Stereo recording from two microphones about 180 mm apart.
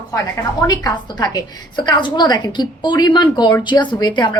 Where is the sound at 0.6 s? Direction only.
20° left (ahead or behind).